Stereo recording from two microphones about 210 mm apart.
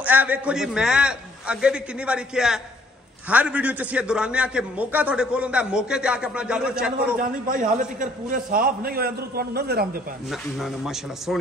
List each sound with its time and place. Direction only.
0.0 s a man's voice: 5° right (ahead or behind)
7.2 s a man's voice: 40° right (ahead or behind)
10.3 s a man's voice: centre (ahead or behind)